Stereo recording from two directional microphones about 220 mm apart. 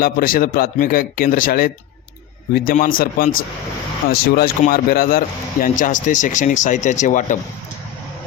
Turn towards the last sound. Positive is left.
turn(degrees=35)  # may be behind; listen again after turning